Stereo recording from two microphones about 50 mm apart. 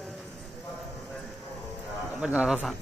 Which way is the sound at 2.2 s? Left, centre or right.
Centre.